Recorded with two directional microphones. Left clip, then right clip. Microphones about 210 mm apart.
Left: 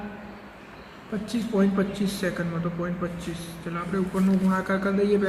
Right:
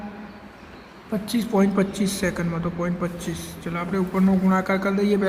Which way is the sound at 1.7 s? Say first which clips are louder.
Right 3 dB; 50° right (ahead or behind).